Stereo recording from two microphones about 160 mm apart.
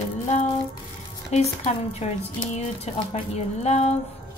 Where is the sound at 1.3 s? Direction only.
45° left (ahead or behind).